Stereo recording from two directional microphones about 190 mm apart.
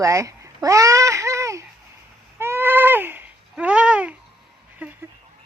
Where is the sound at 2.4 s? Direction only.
10° right (ahead or behind).